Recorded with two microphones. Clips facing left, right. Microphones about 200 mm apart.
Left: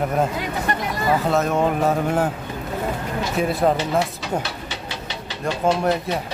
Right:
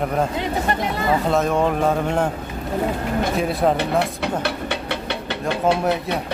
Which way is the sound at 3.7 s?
60° right (ahead or behind).